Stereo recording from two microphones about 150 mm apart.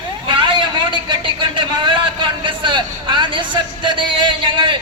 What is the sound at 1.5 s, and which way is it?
A man's voice, 30° right (ahead or behind).